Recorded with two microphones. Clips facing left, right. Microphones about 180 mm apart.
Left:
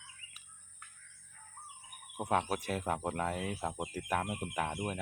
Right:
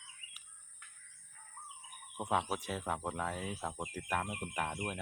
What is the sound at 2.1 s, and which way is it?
Speech, 10° left (ahead or behind).